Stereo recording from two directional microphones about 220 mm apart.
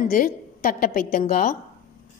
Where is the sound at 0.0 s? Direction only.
40° left (ahead or behind).